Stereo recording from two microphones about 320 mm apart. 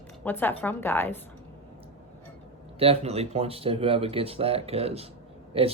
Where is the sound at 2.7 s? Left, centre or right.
Centre.